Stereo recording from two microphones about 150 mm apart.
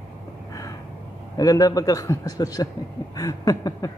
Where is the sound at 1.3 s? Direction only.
25° left (ahead or behind).